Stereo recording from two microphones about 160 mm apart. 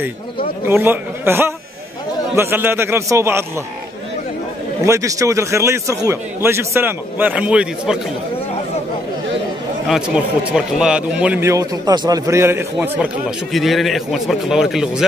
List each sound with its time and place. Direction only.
0.7 s a man's voice: 15° right (ahead or behind)
4.8 s a man's voice: 20° right (ahead or behind)
9.8 s a man's voice: 5° right (ahead or behind)